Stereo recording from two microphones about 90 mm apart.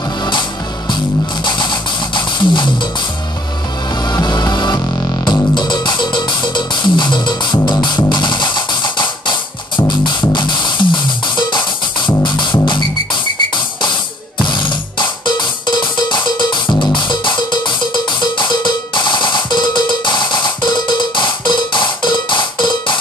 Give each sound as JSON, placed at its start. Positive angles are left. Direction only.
{"t": 0.2, "sound": "music", "side_deg": 55}
{"t": 4.1, "sound": "music", "side_deg": 50}
{"t": 14.4, "sound": "music", "side_deg": 60}